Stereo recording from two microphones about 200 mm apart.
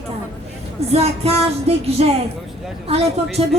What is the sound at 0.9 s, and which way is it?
Speech, 30° right (ahead or behind).